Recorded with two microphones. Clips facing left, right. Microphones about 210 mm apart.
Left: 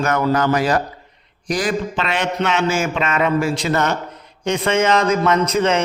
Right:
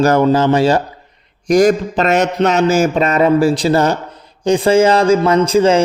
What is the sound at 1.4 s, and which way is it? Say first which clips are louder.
A man's voice: right 10 dB; 45° right (ahead or behind).